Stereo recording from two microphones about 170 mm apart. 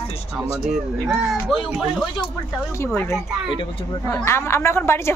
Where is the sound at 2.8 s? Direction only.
15° left (ahead or behind).